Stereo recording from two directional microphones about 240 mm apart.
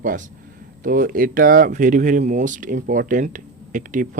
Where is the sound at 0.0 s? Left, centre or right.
Right.